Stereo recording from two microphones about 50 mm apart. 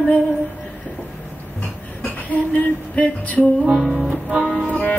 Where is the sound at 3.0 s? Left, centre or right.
Left.